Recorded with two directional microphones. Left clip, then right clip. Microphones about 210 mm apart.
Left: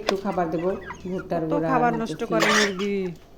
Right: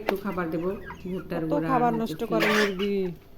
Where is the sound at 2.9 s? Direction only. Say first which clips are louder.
Left 1 dB; 5° right (ahead or behind).